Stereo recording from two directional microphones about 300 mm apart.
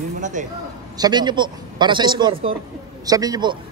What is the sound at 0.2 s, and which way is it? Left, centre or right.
Speech, right.